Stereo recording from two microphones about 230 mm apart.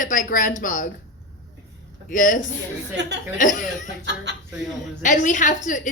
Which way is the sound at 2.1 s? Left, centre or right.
Left.